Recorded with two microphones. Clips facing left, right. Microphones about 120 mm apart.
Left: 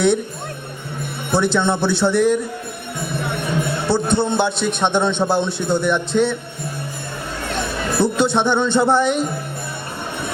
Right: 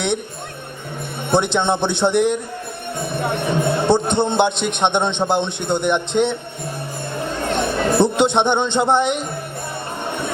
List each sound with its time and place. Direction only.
1.3 s a man's voice: 20° right (ahead or behind)
3.8 s a man's voice: 20° right (ahead or behind)
7.4 s a man's voice: 20° right (ahead or behind)